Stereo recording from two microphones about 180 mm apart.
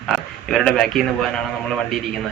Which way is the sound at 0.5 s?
Centre (ahead or behind).